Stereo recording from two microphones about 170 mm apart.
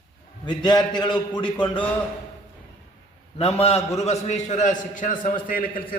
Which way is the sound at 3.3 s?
35° left (ahead or behind).